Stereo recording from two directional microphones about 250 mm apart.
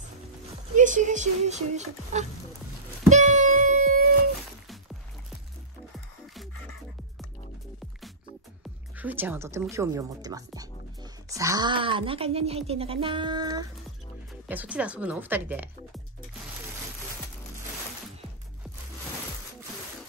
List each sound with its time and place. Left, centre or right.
0.7 s speech: right
3.1 s music: right
8.9 s speech: centre
14.5 s speech: centre